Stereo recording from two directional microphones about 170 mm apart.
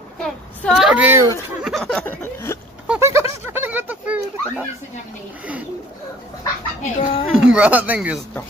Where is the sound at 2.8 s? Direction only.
10° right (ahead or behind).